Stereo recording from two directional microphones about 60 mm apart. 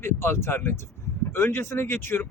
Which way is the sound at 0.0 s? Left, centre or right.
Left.